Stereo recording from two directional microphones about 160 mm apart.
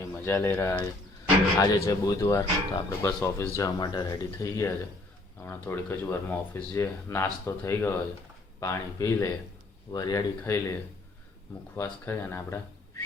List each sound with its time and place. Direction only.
0.0 s speech: 15° left (ahead or behind)